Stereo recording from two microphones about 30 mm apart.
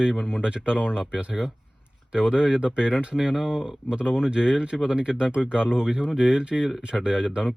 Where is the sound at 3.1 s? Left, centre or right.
Right.